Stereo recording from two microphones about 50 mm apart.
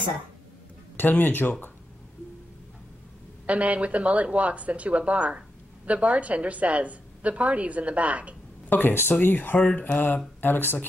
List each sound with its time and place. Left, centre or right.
0.9 s speech: left
3.4 s a woman's voice: right
8.6 s speech: left